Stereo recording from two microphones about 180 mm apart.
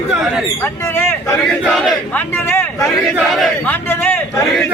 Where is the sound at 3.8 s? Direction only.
10° left (ahead or behind).